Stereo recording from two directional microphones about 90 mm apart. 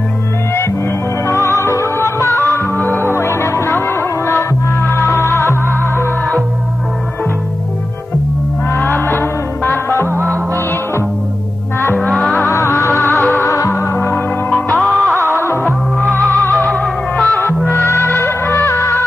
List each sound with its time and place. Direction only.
1.2 s music: 30° left (ahead or behind)
8.7 s music: 20° left (ahead or behind)
10.1 s music: 30° right (ahead or behind)
11.8 s music: 25° left (ahead or behind)
12.1 s music: centre (ahead or behind)
12.4 s music: 35° left (ahead or behind); by 14.6 s 20° left (ahead or behind)
14.7 s music: 5° left (ahead or behind)
15.3 s music: 25° left (ahead or behind)
16.0 s music: 25° right (ahead or behind)
16.3 s music: 20° left (ahead or behind)
16.7 s music: 10° left (ahead or behind)
17.6 s music: 30° left (ahead or behind)